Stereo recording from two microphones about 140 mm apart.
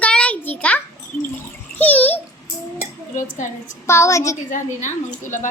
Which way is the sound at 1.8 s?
10° left (ahead or behind).